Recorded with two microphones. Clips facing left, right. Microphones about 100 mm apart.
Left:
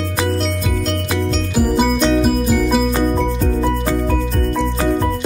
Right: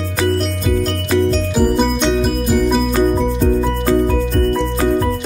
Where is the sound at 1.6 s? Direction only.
5° left (ahead or behind).